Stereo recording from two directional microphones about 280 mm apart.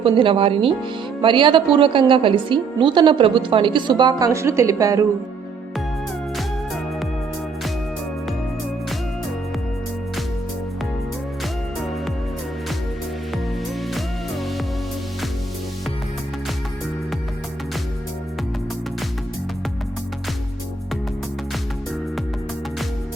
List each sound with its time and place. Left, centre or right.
0.0 s a woman's voice: centre